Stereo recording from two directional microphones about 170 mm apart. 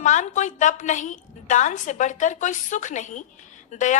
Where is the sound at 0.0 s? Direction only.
45° left (ahead or behind).